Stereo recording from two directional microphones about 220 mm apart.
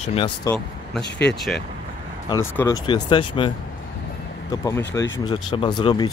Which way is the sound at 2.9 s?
20° left (ahead or behind).